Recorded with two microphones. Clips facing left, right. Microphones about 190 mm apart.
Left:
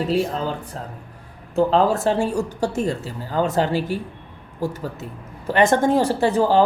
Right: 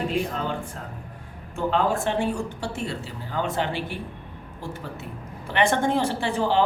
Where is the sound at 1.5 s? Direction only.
40° left (ahead or behind).